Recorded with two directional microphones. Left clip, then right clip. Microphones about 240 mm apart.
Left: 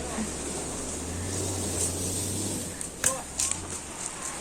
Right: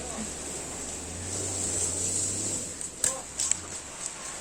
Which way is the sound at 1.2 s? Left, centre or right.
Left.